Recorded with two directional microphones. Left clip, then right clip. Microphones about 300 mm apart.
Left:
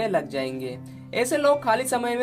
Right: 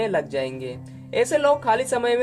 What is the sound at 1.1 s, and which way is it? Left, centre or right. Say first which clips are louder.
Speech: right 2 dB; left.